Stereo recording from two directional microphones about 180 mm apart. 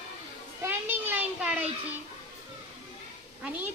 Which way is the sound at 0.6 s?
10° right (ahead or behind).